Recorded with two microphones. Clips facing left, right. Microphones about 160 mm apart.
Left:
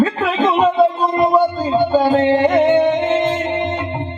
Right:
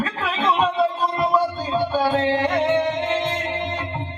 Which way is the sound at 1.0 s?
50° left (ahead or behind).